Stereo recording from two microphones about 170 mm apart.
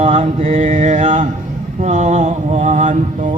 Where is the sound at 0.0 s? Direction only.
40° right (ahead or behind).